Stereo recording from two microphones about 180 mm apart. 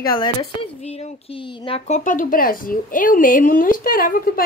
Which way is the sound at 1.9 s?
45° left (ahead or behind).